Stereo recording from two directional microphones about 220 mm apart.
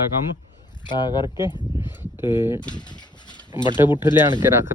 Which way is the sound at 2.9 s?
20° left (ahead or behind).